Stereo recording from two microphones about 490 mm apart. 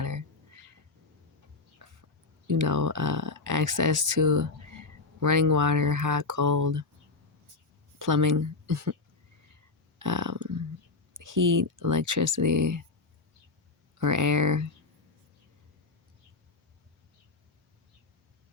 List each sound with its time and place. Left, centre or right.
0.0 s a sound: right
1.8 s whispering: right
2.5 s speech: right
7.9 s speech: right
10.0 s burping: right
11.1 s speech: right
14.0 s speech: right